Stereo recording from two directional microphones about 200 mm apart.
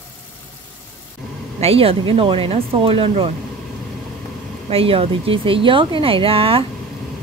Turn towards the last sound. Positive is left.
turn(degrees=-25)  # may be behind; listen again after turning